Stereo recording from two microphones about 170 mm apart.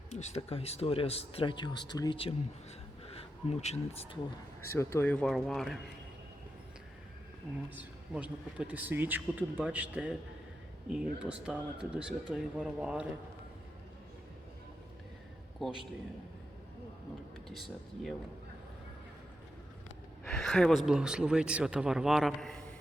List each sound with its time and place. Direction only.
0.1 s speech: 40° left (ahead or behind)
4.7 s speech: 15° left (ahead or behind)
7.8 s a man's voice: 5° right (ahead or behind)
15.6 s speech: centre (ahead or behind)
17.5 s speech: centre (ahead or behind)
20.2 s speech: 5° left (ahead or behind)